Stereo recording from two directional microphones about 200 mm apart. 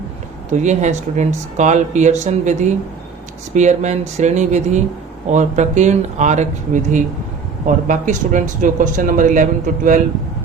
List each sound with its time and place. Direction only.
0.5 s speech: 35° right (ahead or behind)